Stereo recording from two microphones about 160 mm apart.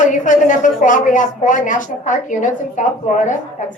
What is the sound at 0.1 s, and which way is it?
A woman's voice, 50° left (ahead or behind).